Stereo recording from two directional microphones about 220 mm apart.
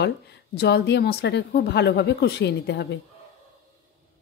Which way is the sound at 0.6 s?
50° left (ahead or behind).